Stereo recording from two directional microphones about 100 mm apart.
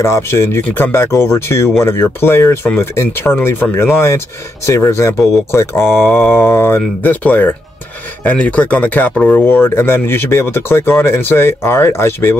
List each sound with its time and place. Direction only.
0.0 s speech: 25° left (ahead or behind)